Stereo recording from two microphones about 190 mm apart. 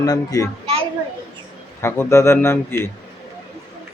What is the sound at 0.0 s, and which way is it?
Speech, 20° left (ahead or behind).